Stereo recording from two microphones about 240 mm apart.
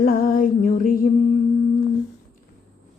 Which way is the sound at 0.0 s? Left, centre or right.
Left.